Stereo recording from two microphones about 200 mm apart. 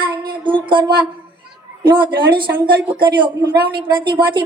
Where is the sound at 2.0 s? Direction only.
25° right (ahead or behind).